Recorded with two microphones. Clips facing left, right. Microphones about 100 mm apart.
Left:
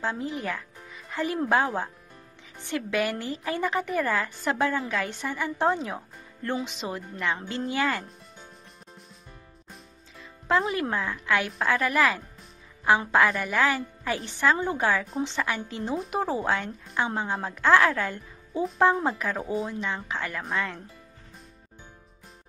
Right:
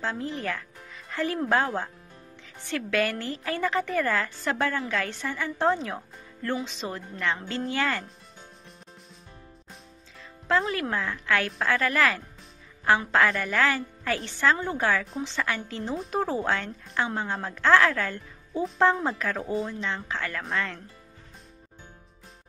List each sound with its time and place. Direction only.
0.0 s a woman's voice: 15° left (ahead or behind)
10.7 s a woman's voice: 20° left (ahead or behind)